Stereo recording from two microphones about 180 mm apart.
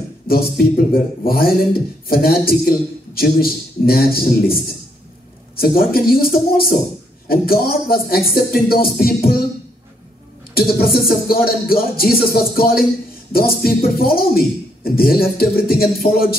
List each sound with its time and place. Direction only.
0.3 s speech: 55° left (ahead or behind)
10.5 s speech: 55° left (ahead or behind)